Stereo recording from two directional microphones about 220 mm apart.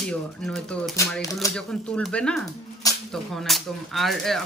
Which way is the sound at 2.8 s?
15° left (ahead or behind).